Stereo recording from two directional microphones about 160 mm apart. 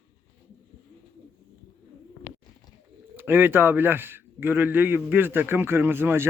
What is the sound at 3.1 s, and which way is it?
A man's voice, 15° right (ahead or behind).